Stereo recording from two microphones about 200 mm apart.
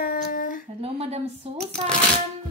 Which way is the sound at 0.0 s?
45° left (ahead or behind).